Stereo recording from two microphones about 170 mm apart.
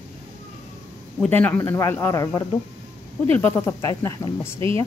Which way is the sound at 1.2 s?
10° left (ahead or behind).